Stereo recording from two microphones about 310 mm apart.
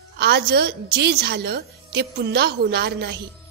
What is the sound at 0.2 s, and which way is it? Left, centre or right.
A woman's voice, right.